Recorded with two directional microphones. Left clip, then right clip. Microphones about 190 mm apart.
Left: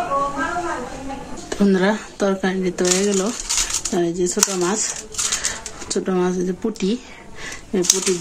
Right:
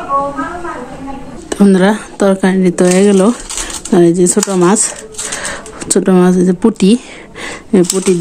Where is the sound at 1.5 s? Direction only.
55° right (ahead or behind).